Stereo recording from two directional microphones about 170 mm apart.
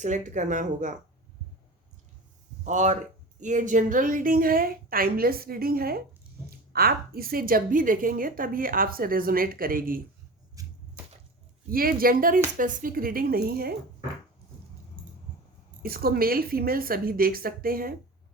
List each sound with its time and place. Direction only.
0.0 s speech: 45° right (ahead or behind)
2.6 s a woman's voice: 45° right (ahead or behind)
10.5 s a sound: 20° right (ahead or behind)
11.7 s a woman's voice: 60° right (ahead or behind)
15.8 s a woman's voice: 60° right (ahead or behind)